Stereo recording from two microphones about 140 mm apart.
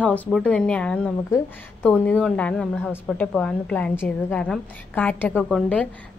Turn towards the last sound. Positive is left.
turn(degrees=10)  # may be behind; listen again after turning